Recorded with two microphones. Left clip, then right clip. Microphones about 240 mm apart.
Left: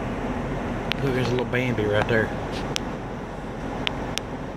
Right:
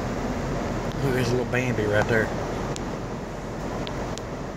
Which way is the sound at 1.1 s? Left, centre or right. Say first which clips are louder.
Right 1 dB; centre.